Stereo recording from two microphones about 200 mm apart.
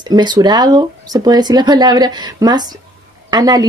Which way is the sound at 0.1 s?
20° right (ahead or behind).